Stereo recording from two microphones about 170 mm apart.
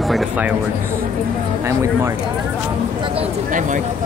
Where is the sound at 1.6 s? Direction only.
15° right (ahead or behind).